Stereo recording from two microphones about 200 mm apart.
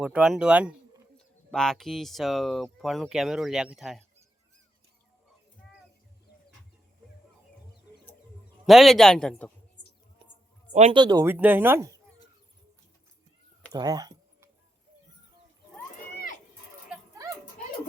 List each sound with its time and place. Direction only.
0.0 s speech: 5° right (ahead or behind)
8.6 s speech: centre (ahead or behind)
10.7 s speech: 35° right (ahead or behind)
10.9 s speech: 20° right (ahead or behind)
13.7 s a sound: 20° right (ahead or behind)